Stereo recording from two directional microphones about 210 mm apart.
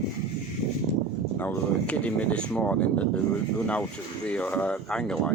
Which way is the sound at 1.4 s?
10° left (ahead or behind).